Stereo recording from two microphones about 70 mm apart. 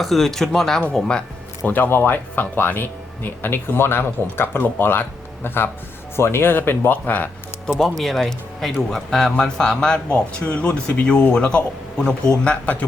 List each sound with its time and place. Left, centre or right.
0.0 s speech: centre
1.6 s speech: left
7.8 s speech: centre; by 12.8 s left